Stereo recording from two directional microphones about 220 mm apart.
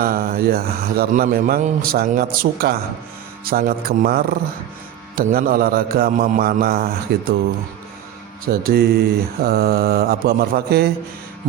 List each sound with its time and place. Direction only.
0.0 s a man's voice: 40° right (ahead or behind)
8.6 s speech: 45° right (ahead or behind)